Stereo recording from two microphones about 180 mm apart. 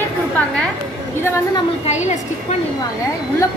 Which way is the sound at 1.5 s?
35° left (ahead or behind).